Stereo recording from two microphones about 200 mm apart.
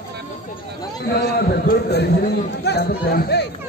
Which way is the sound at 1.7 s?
55° left (ahead or behind).